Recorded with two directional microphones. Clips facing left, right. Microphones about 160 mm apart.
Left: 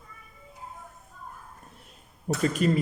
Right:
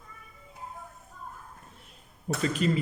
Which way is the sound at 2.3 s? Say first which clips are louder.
Left 3 dB; 40° left (ahead or behind).